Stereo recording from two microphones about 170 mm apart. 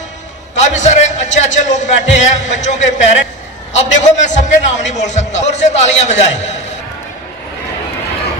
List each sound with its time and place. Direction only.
0.5 s a man's voice: 45° left (ahead or behind)